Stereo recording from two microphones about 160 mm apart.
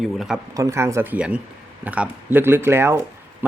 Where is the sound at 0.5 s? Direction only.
20° right (ahead or behind).